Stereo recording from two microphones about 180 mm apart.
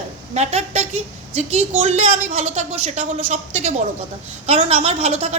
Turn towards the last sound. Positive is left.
turn(degrees=-35)  # may be behind; listen again after turning